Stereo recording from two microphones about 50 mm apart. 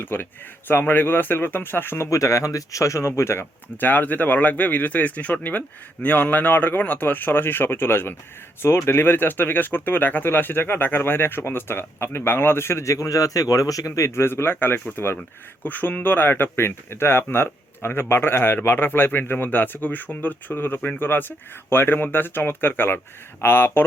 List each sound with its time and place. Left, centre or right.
0.0 s speech: left
2.0 s a man's voice: left
3.2 s speech: left
3.8 s speech: left
12.8 s a man's voice: left